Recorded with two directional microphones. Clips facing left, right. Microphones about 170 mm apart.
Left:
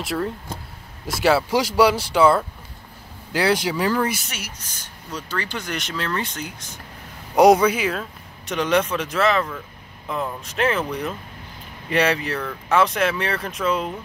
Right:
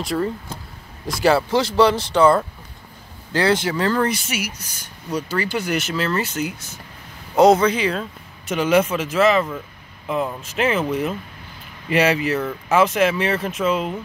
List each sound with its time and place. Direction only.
0.0 s speech: centre (ahead or behind)
4.3 s speech: 10° right (ahead or behind)
7.3 s speech: 10° left (ahead or behind); by 13.9 s 5° right (ahead or behind)